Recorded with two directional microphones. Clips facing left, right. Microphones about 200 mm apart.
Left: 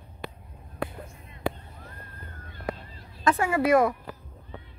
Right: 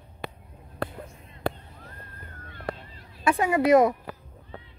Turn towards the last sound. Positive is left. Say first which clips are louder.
# right 3 dB
turn(degrees=-20)  # may be behind; listen again after turning